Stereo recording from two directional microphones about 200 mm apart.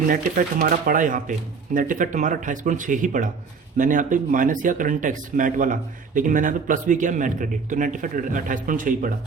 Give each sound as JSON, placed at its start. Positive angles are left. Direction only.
{"t": 0.1, "sound": "speech", "side_deg": -45}